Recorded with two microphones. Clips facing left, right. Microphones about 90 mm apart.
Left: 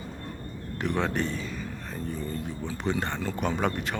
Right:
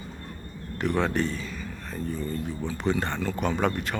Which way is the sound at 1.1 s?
15° left (ahead or behind).